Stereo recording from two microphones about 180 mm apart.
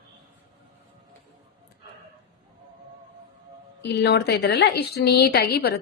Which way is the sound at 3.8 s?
70° left (ahead or behind).